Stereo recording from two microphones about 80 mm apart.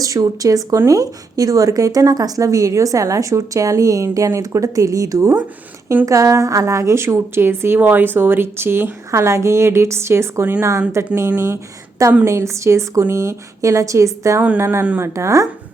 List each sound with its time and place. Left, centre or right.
0.0 s a woman's voice: right